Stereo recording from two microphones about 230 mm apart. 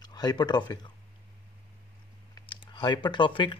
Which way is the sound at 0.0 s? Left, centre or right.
Centre.